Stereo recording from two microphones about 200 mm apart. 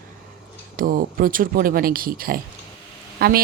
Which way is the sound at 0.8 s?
45° right (ahead or behind).